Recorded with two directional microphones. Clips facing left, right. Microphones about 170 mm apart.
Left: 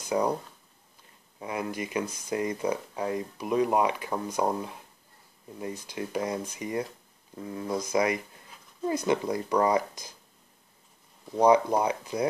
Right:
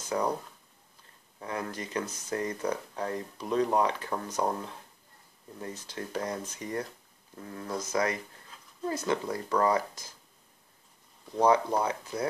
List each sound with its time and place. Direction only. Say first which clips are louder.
0.0 s speech: left 3 dB; 10° left (ahead or behind)
1.4 s speech: left 3 dB; 10° left (ahead or behind)
11.3 s speech: left 3 dB; 15° left (ahead or behind)